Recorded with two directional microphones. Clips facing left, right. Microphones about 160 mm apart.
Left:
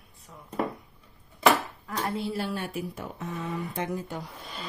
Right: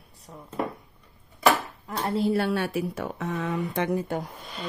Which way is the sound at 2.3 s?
70° right (ahead or behind).